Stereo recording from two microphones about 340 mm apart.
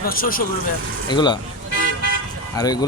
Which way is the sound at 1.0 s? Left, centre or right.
Centre.